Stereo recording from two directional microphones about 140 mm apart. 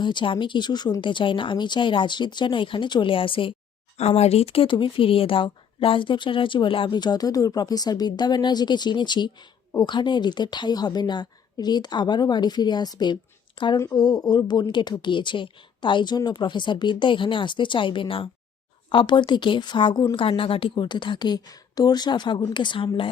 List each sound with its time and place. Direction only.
0.0 s speech: 35° left (ahead or behind)
3.9 s speech: 50° left (ahead or behind)